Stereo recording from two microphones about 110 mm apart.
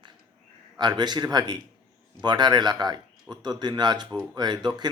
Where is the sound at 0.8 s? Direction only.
40° right (ahead or behind).